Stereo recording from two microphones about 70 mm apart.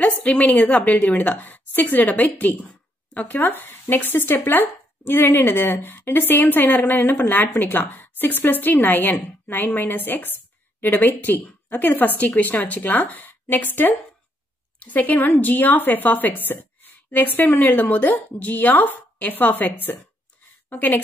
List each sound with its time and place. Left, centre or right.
0.0 s a woman's voice: left